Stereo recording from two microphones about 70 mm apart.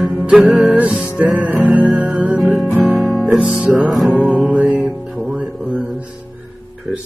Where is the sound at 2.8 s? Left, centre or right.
Right.